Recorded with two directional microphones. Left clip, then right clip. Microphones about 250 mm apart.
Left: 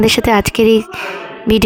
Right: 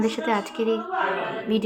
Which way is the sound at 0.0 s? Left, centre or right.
Left.